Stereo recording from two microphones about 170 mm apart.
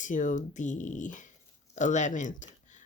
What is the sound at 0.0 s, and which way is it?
Speech, 50° left (ahead or behind).